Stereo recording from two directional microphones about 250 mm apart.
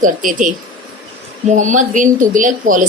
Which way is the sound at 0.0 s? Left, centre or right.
Right.